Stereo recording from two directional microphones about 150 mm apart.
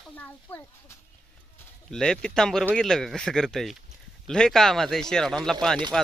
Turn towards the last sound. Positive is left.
turn(degrees=5)  # may be behind; listen again after turning